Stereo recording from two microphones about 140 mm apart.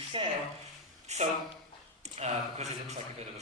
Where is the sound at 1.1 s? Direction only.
50° right (ahead or behind).